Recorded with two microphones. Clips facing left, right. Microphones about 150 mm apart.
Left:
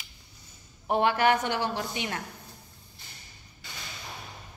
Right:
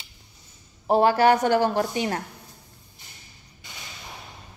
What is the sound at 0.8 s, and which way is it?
A woman's voice, 35° right (ahead or behind).